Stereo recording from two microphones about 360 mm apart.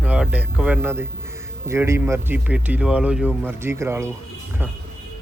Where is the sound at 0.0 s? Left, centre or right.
Centre.